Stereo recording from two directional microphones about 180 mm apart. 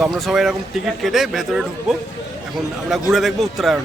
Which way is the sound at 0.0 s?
Centre (ahead or behind).